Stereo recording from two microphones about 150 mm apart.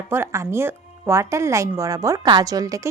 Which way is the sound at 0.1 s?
15° right (ahead or behind).